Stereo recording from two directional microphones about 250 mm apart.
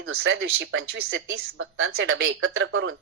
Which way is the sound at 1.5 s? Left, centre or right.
Right.